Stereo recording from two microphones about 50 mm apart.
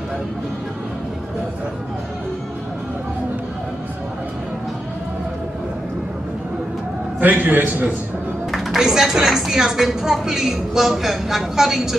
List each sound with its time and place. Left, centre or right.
7.2 s a man's voice: right
8.5 s music: centre
8.7 s speech: centre